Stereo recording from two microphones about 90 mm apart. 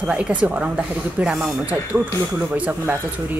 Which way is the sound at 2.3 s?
15° right (ahead or behind).